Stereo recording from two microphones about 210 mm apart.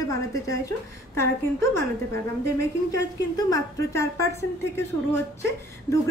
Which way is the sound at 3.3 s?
15° left (ahead or behind).